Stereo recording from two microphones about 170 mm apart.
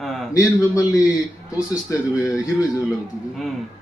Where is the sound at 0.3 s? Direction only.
20° left (ahead or behind).